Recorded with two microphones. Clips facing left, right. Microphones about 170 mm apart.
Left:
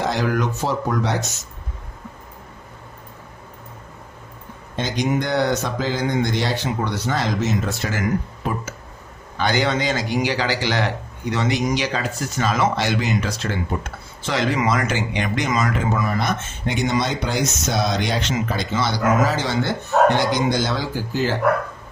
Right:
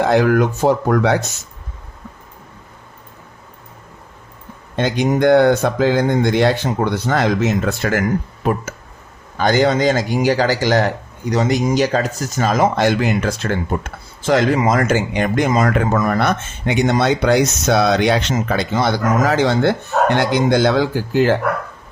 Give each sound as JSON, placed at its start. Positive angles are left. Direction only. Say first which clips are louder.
{"t": 0.0, "sound": "speech", "louder": "right 8 dB", "side_deg": -55}
{"t": 4.8, "sound": "speech", "louder": "right 6 dB", "side_deg": -55}
{"t": 9.4, "sound": "speech", "louder": "right 6 dB", "side_deg": -45}
{"t": 15.5, "sound": "speech", "louder": "right 5 dB", "side_deg": -60}